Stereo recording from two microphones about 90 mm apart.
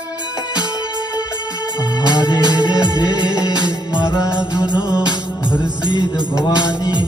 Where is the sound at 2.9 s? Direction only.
55° left (ahead or behind).